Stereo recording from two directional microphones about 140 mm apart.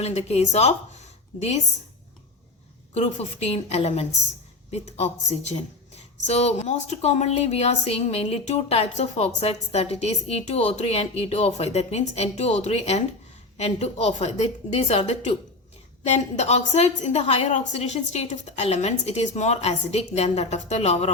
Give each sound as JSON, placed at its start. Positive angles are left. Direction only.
{"t": 0.0, "sound": "a woman's voice", "side_deg": 50}
{"t": 2.9, "sound": "a woman's voice", "side_deg": 50}